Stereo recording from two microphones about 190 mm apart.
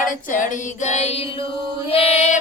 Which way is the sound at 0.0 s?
45° left (ahead or behind).